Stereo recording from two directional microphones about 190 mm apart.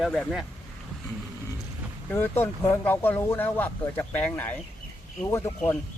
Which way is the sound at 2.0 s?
10° left (ahead or behind).